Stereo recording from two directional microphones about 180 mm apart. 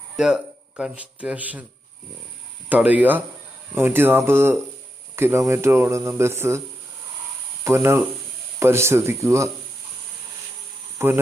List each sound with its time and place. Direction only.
0.2 s speech: 5° right (ahead or behind)
2.6 s speech: 10° right (ahead or behind)
7.6 s speech: 15° right (ahead or behind)
10.9 s speech: 15° right (ahead or behind)